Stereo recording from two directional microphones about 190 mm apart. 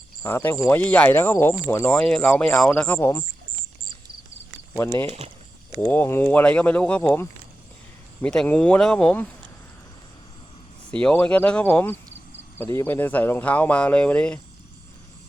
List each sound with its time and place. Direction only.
0.2 s speech: 10° left (ahead or behind)
4.7 s speech: 15° left (ahead or behind)
5.0 s speech: 35° right (ahead or behind)
5.7 s speech: 10° left (ahead or behind)
11.0 s speech: 5° left (ahead or behind)